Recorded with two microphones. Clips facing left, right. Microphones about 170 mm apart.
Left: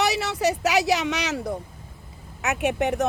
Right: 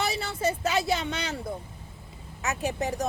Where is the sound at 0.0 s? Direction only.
75° left (ahead or behind).